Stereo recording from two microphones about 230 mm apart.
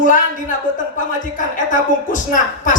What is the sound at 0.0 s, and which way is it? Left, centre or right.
Speech, left.